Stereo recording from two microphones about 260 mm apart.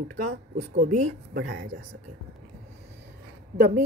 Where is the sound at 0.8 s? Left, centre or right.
Right.